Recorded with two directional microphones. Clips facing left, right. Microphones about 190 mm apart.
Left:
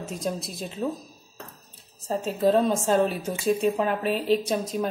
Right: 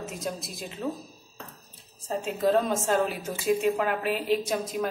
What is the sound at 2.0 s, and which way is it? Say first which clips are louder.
A woman's voice: left 3 dB; 35° left (ahead or behind).